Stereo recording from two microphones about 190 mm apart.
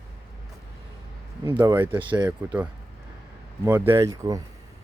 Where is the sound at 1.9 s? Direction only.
25° right (ahead or behind).